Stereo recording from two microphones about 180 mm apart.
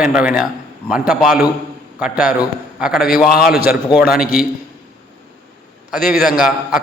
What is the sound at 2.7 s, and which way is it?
A man's voice, 5° right (ahead or behind).